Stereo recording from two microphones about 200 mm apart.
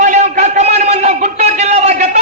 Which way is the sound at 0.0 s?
35° right (ahead or behind).